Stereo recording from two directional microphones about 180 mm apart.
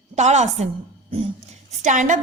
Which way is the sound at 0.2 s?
40° right (ahead or behind).